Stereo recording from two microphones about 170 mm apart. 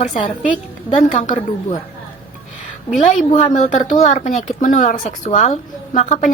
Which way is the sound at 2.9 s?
45° left (ahead or behind).